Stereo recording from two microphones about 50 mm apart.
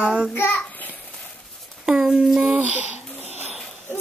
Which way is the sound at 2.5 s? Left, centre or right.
Right.